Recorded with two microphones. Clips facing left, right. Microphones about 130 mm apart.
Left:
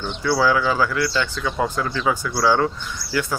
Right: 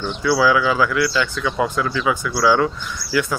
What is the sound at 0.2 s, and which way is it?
Speech, 40° left (ahead or behind).